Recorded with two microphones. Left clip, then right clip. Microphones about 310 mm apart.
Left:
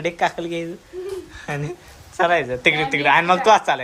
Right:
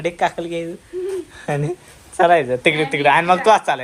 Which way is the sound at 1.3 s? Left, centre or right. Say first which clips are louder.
Right 6 dB; centre.